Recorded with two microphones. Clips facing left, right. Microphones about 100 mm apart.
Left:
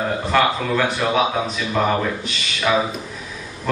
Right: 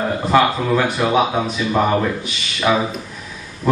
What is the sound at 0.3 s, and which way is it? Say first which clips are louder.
A man's voice: right 4 dB; 5° right (ahead or behind).